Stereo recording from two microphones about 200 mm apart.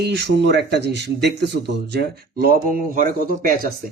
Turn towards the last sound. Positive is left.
turn(degrees=-45)  # may be behind; listen again after turning